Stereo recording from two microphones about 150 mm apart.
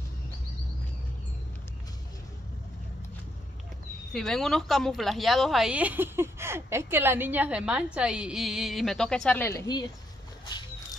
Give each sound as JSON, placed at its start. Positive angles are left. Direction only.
{"t": 4.1, "sound": "speech", "side_deg": 5}
{"t": 10.4, "sound": "dog", "side_deg": 30}